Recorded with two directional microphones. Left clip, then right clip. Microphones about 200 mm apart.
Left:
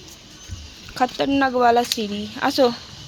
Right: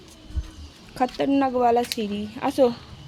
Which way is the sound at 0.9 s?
5° right (ahead or behind).